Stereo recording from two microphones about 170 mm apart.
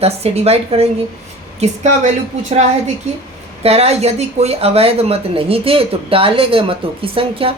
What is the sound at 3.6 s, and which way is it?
Speech, 35° right (ahead or behind).